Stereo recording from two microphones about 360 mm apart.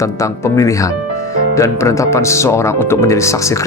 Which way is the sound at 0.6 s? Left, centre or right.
Centre.